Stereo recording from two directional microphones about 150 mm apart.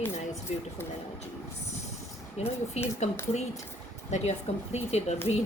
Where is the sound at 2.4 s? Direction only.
45° left (ahead or behind).